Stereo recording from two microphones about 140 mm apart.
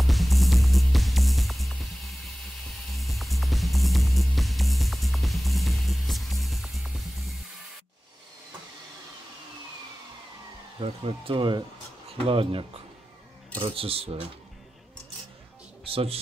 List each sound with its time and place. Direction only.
0.0 s music: centre (ahead or behind)
10.8 s speech: 45° right (ahead or behind)
15.8 s speech: 40° right (ahead or behind)